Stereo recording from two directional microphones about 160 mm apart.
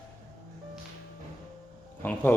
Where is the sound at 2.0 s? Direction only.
10° left (ahead or behind).